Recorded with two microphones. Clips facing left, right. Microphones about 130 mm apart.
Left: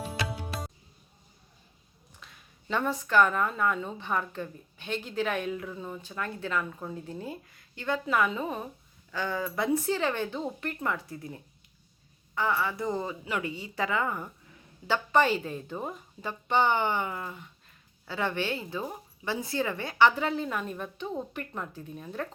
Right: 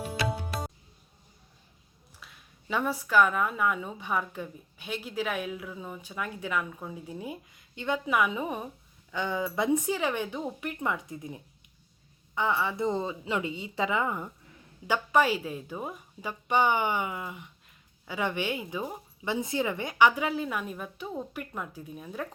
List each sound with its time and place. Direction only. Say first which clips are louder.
2.2 s a woman's voice: left 1 dB; 5° right (ahead or behind)